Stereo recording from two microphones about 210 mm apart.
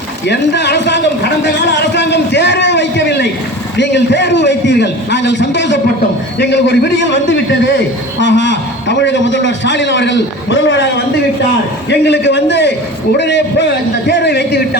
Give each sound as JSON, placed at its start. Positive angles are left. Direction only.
{"t": 0.3, "sound": "a man's voice", "side_deg": 55}
{"t": 8.2, "sound": "a man's voice", "side_deg": 55}